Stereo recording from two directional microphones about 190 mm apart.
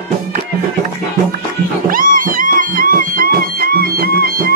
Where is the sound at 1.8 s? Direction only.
45° right (ahead or behind).